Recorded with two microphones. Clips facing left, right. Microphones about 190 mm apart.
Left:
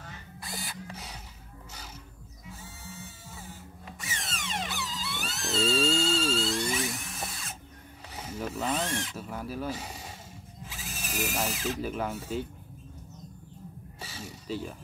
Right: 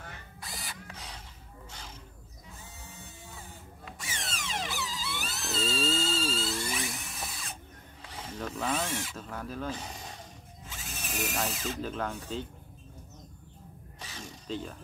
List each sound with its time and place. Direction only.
0.4 s drill: centre (ahead or behind)
4.0 s vehicle: centre (ahead or behind)
8.1 s mechanisms: 10° left (ahead or behind)
8.7 s zipper: 5° right (ahead or behind)
9.1 s speech: 10° left (ahead or behind)
14.0 s crow: 5° left (ahead or behind)